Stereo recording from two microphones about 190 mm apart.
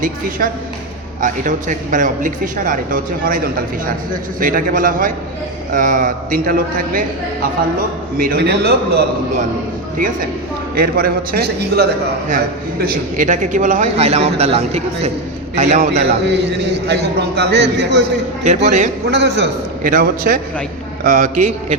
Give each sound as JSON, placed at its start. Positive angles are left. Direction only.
{"t": 0.0, "sound": "a man's voice", "side_deg": -45}
{"t": 8.2, "sound": "a man's voice", "side_deg": -55}
{"t": 10.8, "sound": "a man's voice", "side_deg": -50}
{"t": 16.2, "sound": "a man's voice", "side_deg": -65}
{"t": 18.4, "sound": "a man's voice", "side_deg": -40}
{"t": 19.1, "sound": "a man's voice", "side_deg": -65}